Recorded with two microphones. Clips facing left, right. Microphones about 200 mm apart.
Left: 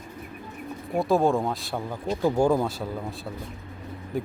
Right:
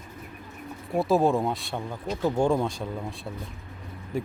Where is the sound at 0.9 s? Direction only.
Centre (ahead or behind).